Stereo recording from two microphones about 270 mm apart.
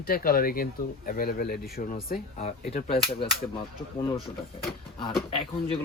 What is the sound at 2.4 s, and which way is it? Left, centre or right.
Speech, left.